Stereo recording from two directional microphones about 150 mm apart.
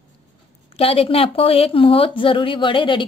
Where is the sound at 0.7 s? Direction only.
40° left (ahead or behind).